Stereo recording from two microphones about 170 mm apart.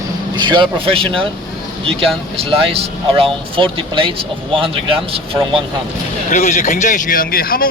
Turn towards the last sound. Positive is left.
turn(degrees=60)  # may be behind; listen again after turning